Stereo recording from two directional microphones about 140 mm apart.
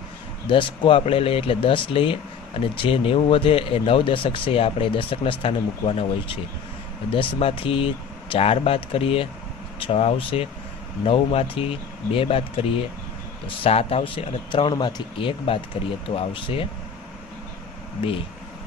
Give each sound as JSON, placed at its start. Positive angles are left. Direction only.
{"t": 0.5, "sound": "speech", "side_deg": 35}